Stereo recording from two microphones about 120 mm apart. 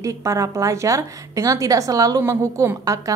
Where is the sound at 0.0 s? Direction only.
25° right (ahead or behind).